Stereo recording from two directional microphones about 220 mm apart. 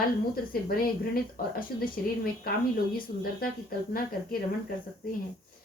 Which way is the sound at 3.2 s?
40° left (ahead or behind).